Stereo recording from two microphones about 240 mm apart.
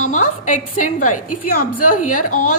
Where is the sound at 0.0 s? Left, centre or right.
Left.